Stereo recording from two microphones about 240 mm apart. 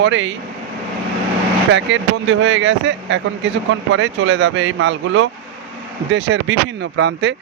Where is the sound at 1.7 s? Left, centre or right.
Right.